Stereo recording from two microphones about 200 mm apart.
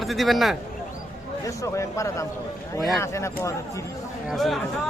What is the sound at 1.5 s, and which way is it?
Speech, 15° left (ahead or behind).